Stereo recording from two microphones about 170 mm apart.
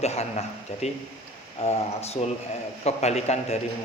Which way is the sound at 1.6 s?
40° left (ahead or behind).